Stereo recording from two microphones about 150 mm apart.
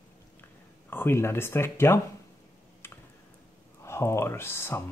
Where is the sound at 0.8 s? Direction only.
15° left (ahead or behind).